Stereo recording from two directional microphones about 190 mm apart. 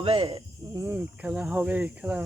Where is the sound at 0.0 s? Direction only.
30° right (ahead or behind).